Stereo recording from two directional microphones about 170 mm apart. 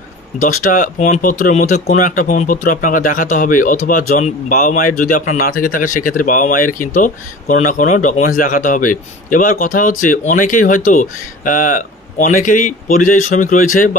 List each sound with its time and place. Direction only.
0.4 s speech: 50° left (ahead or behind)